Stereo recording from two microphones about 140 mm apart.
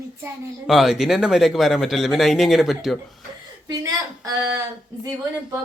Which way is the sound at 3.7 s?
25° right (ahead or behind).